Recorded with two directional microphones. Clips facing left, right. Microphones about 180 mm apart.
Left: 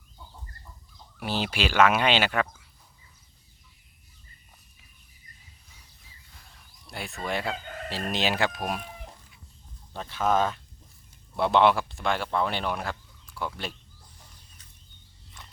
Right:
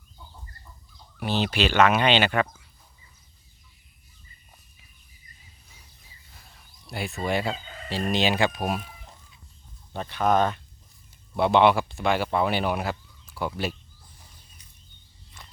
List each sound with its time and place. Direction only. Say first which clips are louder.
1.2 s speech: right 4 dB; 5° left (ahead or behind)
6.8 s speech: right 5 dB; centre (ahead or behind)
7.5 s chicken: left 3 dB; 60° left (ahead or behind)
7.9 s speech: right 4 dB; centre (ahead or behind)
9.9 s speech: right 2 dB; centre (ahead or behind)
15.4 s a sound: even; 5° right (ahead or behind)